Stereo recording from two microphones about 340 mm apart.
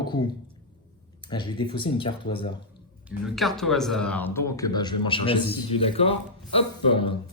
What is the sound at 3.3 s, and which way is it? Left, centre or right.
Speech, centre.